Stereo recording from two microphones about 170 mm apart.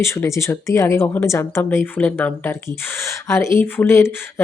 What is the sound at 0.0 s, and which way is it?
A woman's voice, 15° left (ahead or behind).